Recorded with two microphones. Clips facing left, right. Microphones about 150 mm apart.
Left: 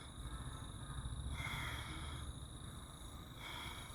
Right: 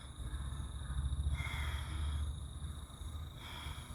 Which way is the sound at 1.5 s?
Centre (ahead or behind).